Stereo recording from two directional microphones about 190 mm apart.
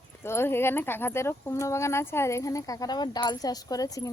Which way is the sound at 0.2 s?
10° left (ahead or behind).